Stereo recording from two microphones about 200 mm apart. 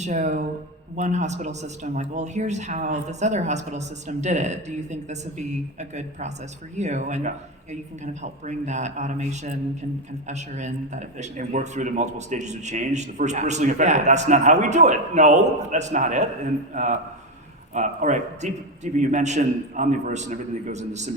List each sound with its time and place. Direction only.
0.0 s a man's voice: 35° right (ahead or behind)